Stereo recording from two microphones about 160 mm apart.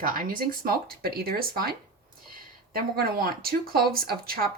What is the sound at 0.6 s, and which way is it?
Speech, 70° right (ahead or behind).